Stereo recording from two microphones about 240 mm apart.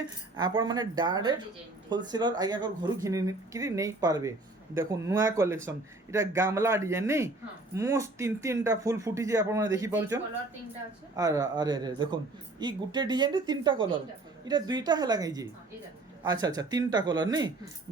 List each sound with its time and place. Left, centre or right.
0.3 s speech: centre
11.2 s speech: centre